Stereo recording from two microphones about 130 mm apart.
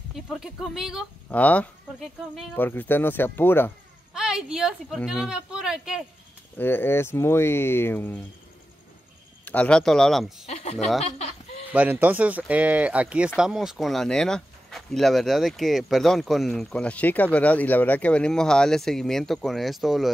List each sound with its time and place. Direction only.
0.1 s speech: centre (ahead or behind)
1.3 s speech: 10° left (ahead or behind)
2.0 s speech: centre (ahead or behind)
2.5 s speech: 15° left (ahead or behind)
4.1 s speech: 5° right (ahead or behind)
6.6 s speech: 15° left (ahead or behind)
9.4 s speech: 10° left (ahead or behind)
10.4 s speech: 55° left (ahead or behind)
11.7 s speech: 10° right (ahead or behind)